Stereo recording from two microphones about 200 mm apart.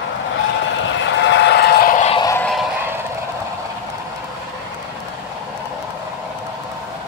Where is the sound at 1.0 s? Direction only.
65° left (ahead or behind); by 2.0 s 45° left (ahead or behind).